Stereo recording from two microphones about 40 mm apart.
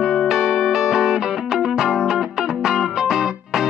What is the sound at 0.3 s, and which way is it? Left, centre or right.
Music, centre.